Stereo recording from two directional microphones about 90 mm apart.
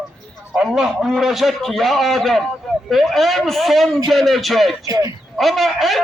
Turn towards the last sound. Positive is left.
turn(degrees=0)  # may be behind; listen again after turning